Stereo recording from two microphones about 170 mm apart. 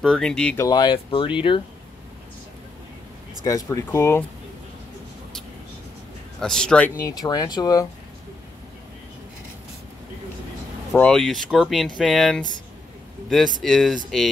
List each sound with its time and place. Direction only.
0.0 s speech: 5° left (ahead or behind)
0.6 s speech: 25° left (ahead or behind)
3.4 s speech: 20° left (ahead or behind)
6.4 s speech: 5° left (ahead or behind)
7.1 s speech: 20° left (ahead or behind)
11.0 s speech: 5° left (ahead or behind)